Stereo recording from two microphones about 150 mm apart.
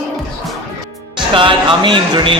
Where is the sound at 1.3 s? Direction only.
35° right (ahead or behind).